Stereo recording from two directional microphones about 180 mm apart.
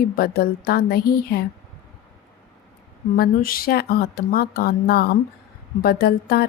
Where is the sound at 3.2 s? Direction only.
55° left (ahead or behind).